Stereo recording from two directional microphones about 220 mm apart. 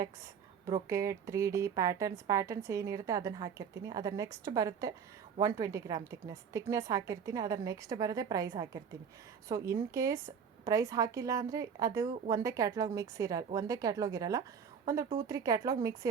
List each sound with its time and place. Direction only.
0.7 s speech: 15° right (ahead or behind)